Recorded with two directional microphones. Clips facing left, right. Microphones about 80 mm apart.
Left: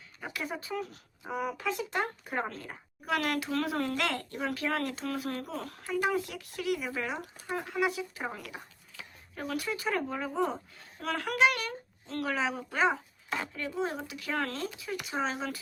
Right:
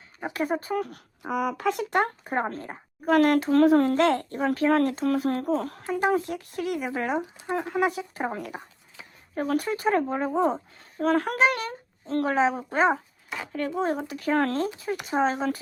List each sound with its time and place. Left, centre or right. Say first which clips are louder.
0.3 s speech: right 9 dB; right
2.3 s speech: right 6 dB; right
13.5 s speech: right 11 dB; right